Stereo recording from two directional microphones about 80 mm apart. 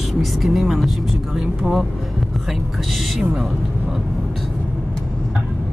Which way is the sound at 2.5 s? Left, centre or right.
Centre.